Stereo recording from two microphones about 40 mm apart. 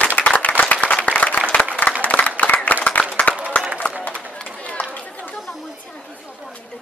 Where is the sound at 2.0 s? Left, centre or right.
Left.